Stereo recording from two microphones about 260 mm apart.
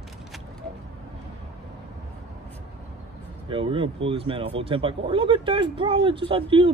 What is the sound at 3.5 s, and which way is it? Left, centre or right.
Speech, centre.